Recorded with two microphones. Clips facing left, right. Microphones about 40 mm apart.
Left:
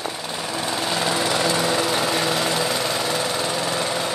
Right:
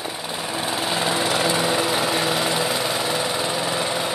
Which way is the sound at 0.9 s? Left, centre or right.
Centre.